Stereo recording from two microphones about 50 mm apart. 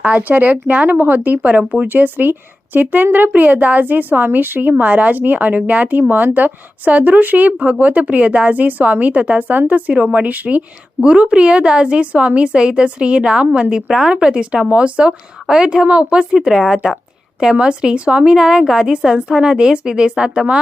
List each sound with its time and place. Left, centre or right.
0.0 s a woman's voice: right
1.4 s a woman's voice: right
1.9 s a woman's voice: right
11.0 s a woman's voice: centre